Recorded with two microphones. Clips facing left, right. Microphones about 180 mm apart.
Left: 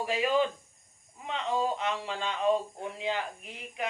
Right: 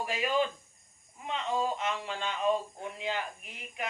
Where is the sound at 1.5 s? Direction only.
30° left (ahead or behind).